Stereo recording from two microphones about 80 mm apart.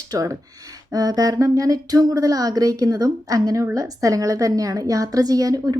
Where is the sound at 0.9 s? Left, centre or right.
Right.